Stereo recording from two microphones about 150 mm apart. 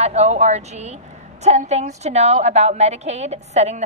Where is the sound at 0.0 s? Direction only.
45° right (ahead or behind).